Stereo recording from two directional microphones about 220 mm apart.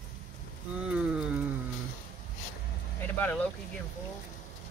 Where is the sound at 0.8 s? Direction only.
5° right (ahead or behind).